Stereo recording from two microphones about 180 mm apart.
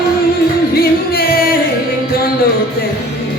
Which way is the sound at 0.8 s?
55° left (ahead or behind).